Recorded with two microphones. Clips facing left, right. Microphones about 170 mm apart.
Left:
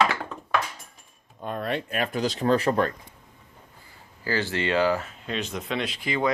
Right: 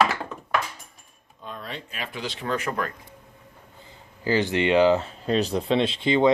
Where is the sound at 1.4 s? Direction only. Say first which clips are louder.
Left 8 dB; 55° left (ahead or behind); by 2.9 s 30° left (ahead or behind).